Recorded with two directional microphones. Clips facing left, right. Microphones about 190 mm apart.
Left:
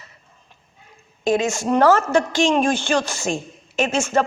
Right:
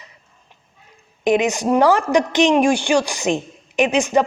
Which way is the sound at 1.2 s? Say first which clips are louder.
Right 3 dB; 20° right (ahead or behind).